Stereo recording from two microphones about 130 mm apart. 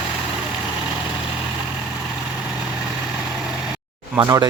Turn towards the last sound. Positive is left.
turn(degrees=-25)  # may be behind; listen again after turning